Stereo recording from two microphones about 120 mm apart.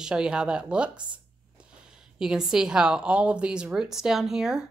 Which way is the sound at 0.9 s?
40° right (ahead or behind).